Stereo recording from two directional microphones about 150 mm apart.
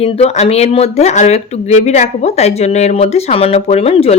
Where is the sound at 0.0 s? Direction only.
45° left (ahead or behind).